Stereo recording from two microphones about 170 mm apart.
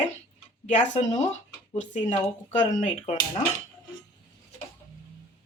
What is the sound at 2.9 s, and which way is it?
Speech, 30° left (ahead or behind).